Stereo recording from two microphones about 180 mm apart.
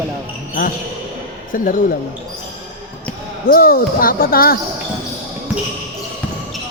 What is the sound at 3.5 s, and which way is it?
Speech, 55° left (ahead or behind).